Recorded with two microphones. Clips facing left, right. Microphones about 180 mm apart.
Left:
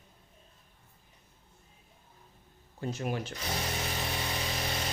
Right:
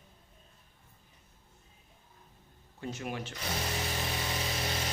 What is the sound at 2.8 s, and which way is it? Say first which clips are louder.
Speech: left 4 dB; 40° left (ahead or behind).